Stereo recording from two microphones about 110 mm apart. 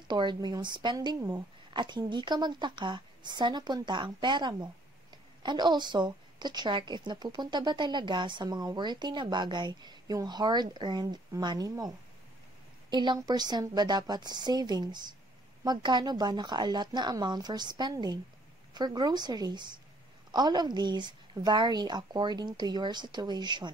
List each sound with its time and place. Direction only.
0.1 s a woman's voice: 45° right (ahead or behind)
12.9 s a woman's voice: 40° right (ahead or behind)